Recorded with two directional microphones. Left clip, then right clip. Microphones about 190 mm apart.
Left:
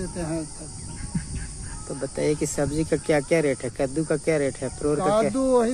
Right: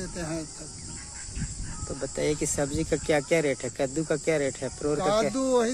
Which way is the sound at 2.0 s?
10° right (ahead or behind).